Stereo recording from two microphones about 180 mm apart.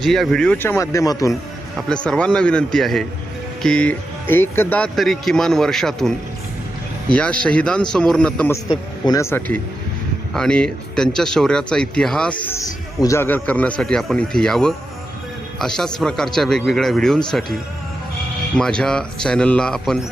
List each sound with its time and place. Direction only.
0.0 s speech: centre (ahead or behind); by 1.3 s 20° left (ahead or behind)
1.9 s speech: 5° left (ahead or behind)
9.0 s speech: 15° left (ahead or behind)
18.5 s speech: 5° left (ahead or behind)